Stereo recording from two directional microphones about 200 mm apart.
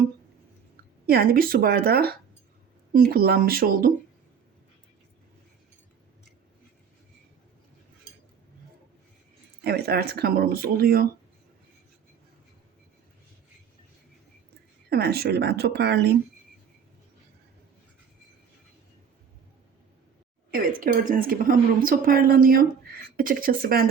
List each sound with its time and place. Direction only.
1.0 s speech: 50° right (ahead or behind)
9.6 s speech: 50° right (ahead or behind)
14.8 s speech: 55° right (ahead or behind)
20.5 s speech: 45° right (ahead or behind)